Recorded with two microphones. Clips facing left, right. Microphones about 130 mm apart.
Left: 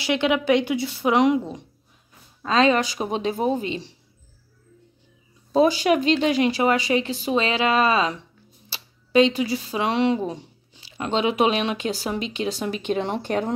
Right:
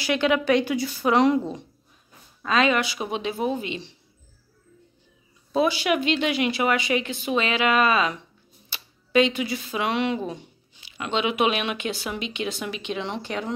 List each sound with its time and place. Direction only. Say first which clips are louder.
0.0 s speech: left 1 dB; 20° left (ahead or behind)
2.4 s speech: left 3 dB; 30° left (ahead or behind)
5.5 s speech: left 4 dB; 40° left (ahead or behind)